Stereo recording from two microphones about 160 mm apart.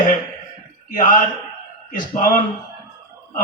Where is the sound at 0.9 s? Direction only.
55° left (ahead or behind).